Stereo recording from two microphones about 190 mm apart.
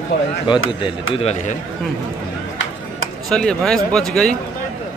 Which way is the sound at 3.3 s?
5° left (ahead or behind).